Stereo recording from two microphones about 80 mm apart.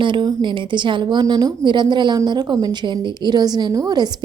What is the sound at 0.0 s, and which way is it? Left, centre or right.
A woman's voice, right.